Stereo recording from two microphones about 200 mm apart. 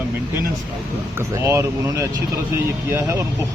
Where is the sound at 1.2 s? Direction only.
15° right (ahead or behind).